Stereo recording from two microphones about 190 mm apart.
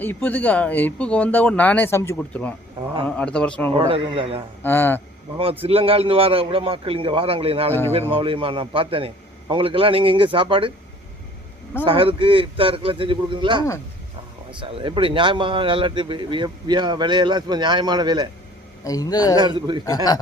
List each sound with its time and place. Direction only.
0.0 s speech: 10° left (ahead or behind)
3.8 s speech: 30° right (ahead or behind)
4.6 s speech: 10° left (ahead or behind)
5.6 s speech: 30° right (ahead or behind)
11.9 s speech: 30° right (ahead or behind)
18.9 s a man's voice: 20° left (ahead or behind)
19.4 s speech: 25° right (ahead or behind)
20.1 s a man's voice: 20° left (ahead or behind)